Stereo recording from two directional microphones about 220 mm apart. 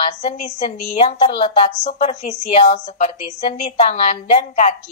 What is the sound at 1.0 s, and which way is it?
A woman's voice, 25° left (ahead or behind).